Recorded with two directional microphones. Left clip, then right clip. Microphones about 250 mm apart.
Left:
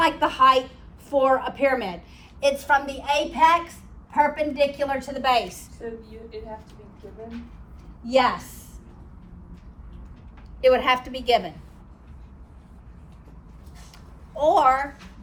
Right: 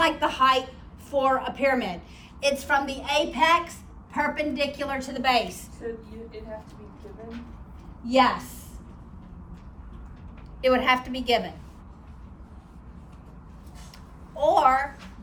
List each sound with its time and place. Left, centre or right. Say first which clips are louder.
0.0 s a woman's voice: left 3 dB; centre
8.0 s a woman's voice: left 1 dB; centre
10.6 s a woman's voice: left 3 dB; centre
14.3 s a woman's voice: left 2 dB; centre